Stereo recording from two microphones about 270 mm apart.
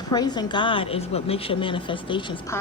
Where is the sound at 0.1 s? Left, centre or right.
Centre.